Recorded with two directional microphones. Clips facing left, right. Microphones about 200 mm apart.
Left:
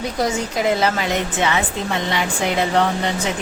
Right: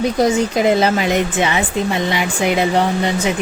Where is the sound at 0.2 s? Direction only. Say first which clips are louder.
Right 4 dB; 20° right (ahead or behind).